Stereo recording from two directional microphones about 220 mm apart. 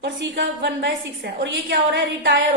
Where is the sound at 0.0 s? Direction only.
50° right (ahead or behind).